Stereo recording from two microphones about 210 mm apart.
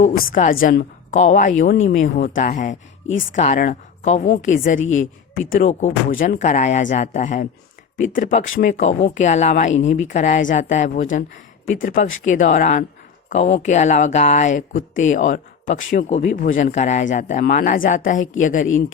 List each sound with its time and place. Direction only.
0.0 s a woman's voice: 40° left (ahead or behind)
1.1 s speech: 35° left (ahead or behind)
4.8 s speech: 70° left (ahead or behind)
5.4 s speech: 40° left (ahead or behind)